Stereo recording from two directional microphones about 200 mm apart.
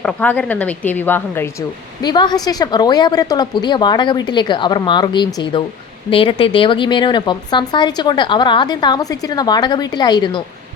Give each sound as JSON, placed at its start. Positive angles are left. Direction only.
{"t": 0.0, "sound": "a woman's voice", "side_deg": 5}
{"t": 2.0, "sound": "speech", "side_deg": 20}